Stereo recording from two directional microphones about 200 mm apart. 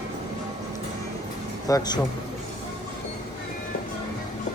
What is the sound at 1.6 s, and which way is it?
Speech, 20° left (ahead or behind).